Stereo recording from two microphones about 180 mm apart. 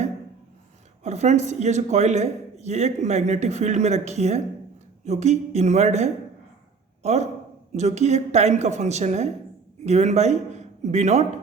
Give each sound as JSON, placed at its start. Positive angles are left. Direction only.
{"t": 1.0, "sound": "a man's voice", "side_deg": -40}